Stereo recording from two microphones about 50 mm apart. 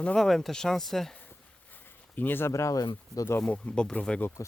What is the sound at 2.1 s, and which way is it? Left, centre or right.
Speech, left.